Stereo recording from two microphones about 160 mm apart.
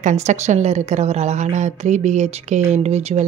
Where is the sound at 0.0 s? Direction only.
45° right (ahead or behind).